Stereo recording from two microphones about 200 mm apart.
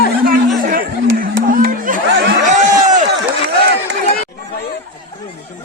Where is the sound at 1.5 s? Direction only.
45° right (ahead or behind).